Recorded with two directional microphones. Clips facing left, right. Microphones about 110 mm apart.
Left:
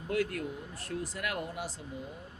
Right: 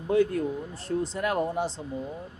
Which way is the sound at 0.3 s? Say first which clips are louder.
Right 9 dB; 30° right (ahead or behind).